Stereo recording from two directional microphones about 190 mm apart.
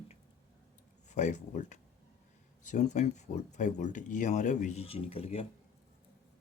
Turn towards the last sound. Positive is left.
turn(degrees=30)  # may be behind; listen again after turning